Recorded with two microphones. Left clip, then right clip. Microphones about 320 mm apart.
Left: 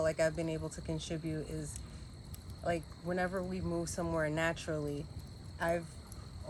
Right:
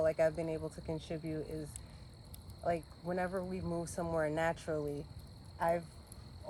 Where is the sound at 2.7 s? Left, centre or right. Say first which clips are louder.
Even; centre.